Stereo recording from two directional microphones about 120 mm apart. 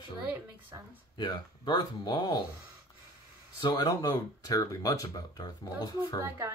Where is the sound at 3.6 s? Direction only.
35° left (ahead or behind).